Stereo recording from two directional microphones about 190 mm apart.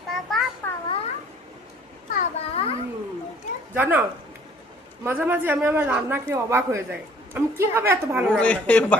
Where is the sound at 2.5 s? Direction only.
30° left (ahead or behind).